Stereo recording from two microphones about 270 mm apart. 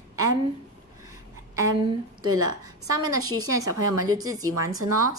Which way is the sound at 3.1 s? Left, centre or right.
Right.